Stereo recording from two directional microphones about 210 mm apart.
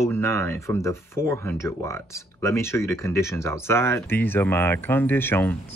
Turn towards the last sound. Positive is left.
turn(degrees=10)  # may be behind; listen again after turning